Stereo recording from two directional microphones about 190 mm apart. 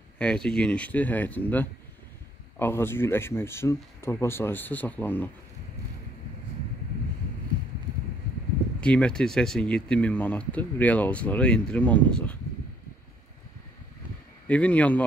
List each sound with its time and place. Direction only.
0.2 s speech: 5° left (ahead or behind)
8.8 s speech: 5° left (ahead or behind)
14.5 s speech: 5° left (ahead or behind)